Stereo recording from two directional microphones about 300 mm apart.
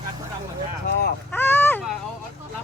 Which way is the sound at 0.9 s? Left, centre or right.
Left.